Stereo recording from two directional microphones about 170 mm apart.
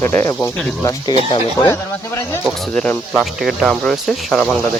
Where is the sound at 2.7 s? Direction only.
5° left (ahead or behind).